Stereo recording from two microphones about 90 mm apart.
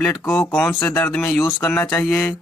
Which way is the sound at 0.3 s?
15° left (ahead or behind).